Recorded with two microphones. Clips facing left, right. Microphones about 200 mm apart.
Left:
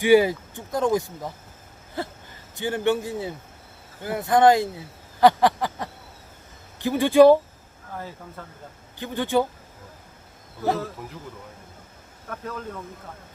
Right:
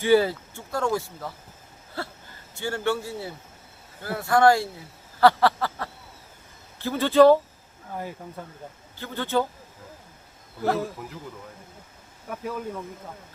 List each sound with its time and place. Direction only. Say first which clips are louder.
0.0 s speech: left 3 dB; 15° left (ahead or behind)
7.9 s speech: right 2 dB; 15° right (ahead or behind)
9.0 s speech: left 3 dB; 15° left (ahead or behind)
12.3 s speech: right 2 dB; 10° right (ahead or behind)